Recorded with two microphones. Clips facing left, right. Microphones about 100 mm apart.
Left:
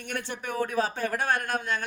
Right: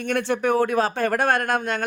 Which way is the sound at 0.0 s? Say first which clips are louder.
Right 12 dB; 90° right.